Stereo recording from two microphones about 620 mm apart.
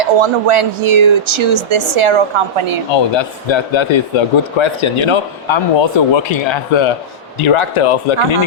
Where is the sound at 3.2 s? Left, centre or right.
Left.